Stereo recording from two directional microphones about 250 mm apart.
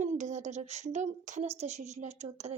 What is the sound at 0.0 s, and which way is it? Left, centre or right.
Speech, right.